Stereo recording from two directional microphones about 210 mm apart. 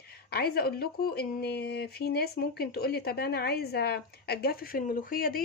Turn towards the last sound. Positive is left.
turn(degrees=45)  # may be behind; listen again after turning